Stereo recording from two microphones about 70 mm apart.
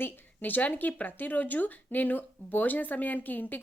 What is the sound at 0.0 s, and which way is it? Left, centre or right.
Speech, left.